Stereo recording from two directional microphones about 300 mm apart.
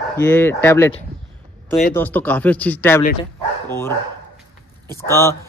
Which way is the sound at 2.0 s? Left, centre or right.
Centre.